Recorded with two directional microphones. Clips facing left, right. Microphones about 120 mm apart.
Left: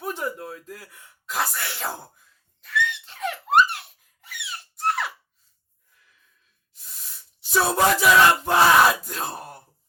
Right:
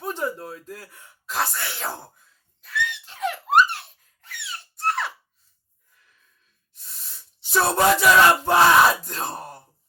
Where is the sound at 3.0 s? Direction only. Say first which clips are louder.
Right 2 dB; 5° right (ahead or behind).